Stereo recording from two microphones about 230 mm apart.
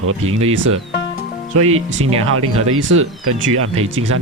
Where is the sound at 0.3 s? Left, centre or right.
Right.